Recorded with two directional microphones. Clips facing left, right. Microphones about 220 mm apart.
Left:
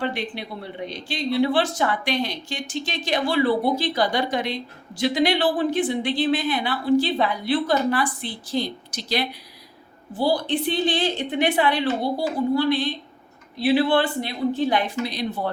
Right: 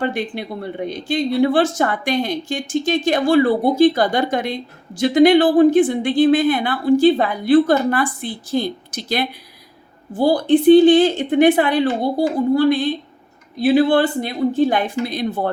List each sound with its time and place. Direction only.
0.0 s speech: 50° right (ahead or behind)